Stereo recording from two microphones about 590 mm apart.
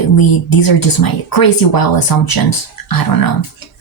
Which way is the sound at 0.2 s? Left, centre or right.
Left.